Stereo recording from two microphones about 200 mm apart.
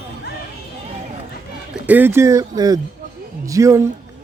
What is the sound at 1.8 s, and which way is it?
Speech, 10° right (ahead or behind).